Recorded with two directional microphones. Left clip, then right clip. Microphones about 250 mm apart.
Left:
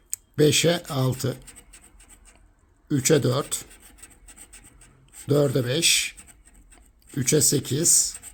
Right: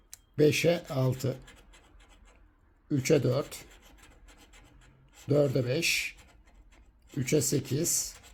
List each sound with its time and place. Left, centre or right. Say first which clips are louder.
0.3 s speech: left 5 dB; centre
2.9 s speech: left 5 dB; centre
5.3 s speech: left 5 dB; centre